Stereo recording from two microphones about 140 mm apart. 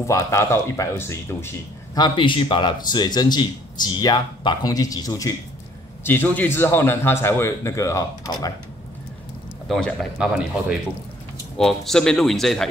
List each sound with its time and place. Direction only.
0.0 s speech: 20° left (ahead or behind)
2.0 s a man's voice: 35° left (ahead or behind)
6.0 s a man's voice: 15° left (ahead or behind)
9.7 s speech: 5° left (ahead or behind)
10.1 s speech: 10° right (ahead or behind)
11.5 s speech: 5° left (ahead or behind)